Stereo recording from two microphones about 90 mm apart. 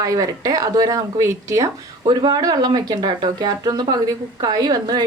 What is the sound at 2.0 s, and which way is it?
A woman's voice, 50° right (ahead or behind).